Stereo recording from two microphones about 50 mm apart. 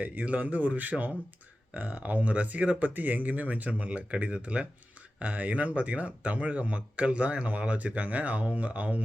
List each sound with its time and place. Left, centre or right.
0.0 s speech: right